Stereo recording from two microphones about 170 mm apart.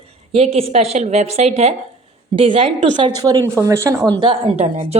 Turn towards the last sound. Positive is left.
turn(degrees=-30)  # may be behind; listen again after turning